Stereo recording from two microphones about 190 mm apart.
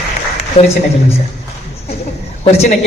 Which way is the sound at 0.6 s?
35° left (ahead or behind).